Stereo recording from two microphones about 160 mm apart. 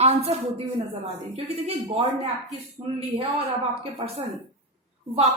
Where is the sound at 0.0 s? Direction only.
40° right (ahead or behind).